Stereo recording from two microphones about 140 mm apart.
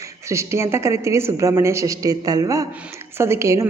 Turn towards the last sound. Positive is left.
turn(degrees=-20)  # may be behind; listen again after turning